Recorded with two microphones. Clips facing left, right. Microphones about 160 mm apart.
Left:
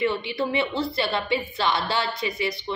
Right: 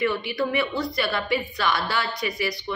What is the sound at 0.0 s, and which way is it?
A woman's voice, 25° left (ahead or behind).